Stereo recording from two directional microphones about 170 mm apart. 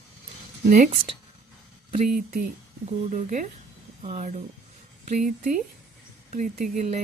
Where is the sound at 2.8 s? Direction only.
45° right (ahead or behind).